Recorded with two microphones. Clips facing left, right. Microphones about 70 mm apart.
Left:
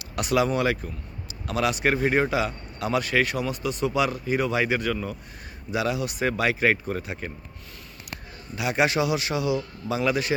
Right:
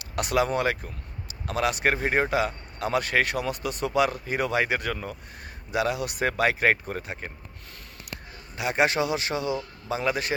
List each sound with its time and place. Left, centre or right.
0.0 s a man's voice: right
8.5 s a man's voice: right